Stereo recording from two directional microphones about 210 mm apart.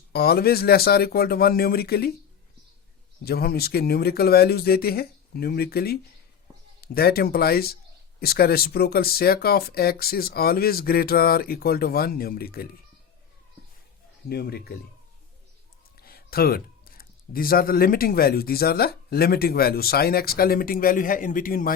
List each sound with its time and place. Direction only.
0.1 s speech: 50° left (ahead or behind)
3.2 s speech: 50° left (ahead or behind)
14.3 s speech: 50° left (ahead or behind)
16.0 s speech: 45° left (ahead or behind)